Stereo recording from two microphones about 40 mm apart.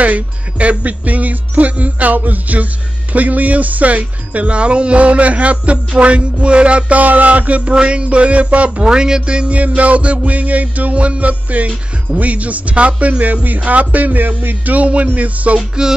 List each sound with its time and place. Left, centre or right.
0.0 s music: right
7.0 s music: right
8.8 s music: centre
13.2 s speech: right
14.8 s music: right